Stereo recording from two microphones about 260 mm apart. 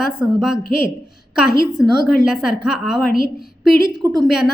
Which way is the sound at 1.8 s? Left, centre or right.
Centre.